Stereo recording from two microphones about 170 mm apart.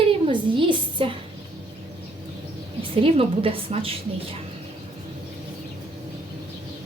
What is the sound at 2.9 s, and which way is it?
A woman's voice, 35° right (ahead or behind).